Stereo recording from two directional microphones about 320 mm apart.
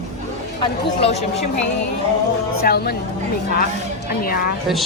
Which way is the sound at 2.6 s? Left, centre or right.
Left.